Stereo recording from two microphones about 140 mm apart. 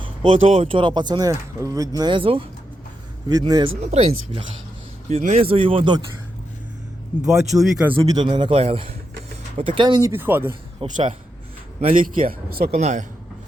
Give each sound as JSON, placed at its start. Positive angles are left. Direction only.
{"t": 0.0, "sound": "speech", "side_deg": -40}
{"t": 3.2, "sound": "speech", "side_deg": -30}
{"t": 3.8, "sound": "speech", "side_deg": -50}
{"t": 7.3, "sound": "speech", "side_deg": 0}
{"t": 8.0, "sound": "speech", "side_deg": -30}
{"t": 10.1, "sound": "speech", "side_deg": -15}
{"t": 10.8, "sound": "speech", "side_deg": -40}
{"t": 11.9, "sound": "speech", "side_deg": -90}
{"t": 12.7, "sound": "speech", "side_deg": -55}